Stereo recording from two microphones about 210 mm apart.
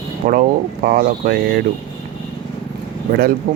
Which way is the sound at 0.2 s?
40° right (ahead or behind).